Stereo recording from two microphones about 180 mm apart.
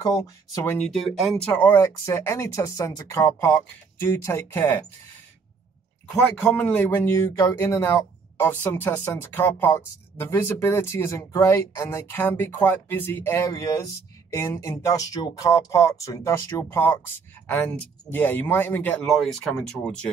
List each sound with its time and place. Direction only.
0.0 s speech: 20° left (ahead or behind)
0.7 s speech: centre (ahead or behind)
6.1 s speech: 5° left (ahead or behind)
18.1 s speech: 10° left (ahead or behind)